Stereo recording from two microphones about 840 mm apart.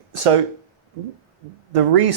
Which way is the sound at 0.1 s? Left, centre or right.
Right.